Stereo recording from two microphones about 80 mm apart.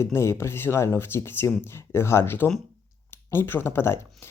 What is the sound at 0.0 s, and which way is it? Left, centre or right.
Speech, left.